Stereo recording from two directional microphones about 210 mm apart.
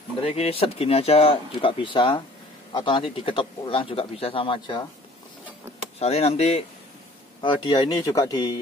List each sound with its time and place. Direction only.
0.2 s speech: 30° left (ahead or behind)
5.9 s speech: 30° left (ahead or behind)